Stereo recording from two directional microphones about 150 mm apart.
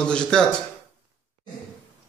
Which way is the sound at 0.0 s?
5° left (ahead or behind).